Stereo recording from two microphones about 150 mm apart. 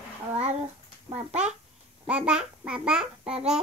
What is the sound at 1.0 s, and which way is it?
Speech, 45° right (ahead or behind).